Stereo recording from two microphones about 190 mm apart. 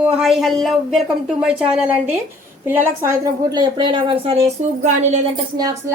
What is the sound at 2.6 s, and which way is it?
A woman's voice, 10° right (ahead or behind).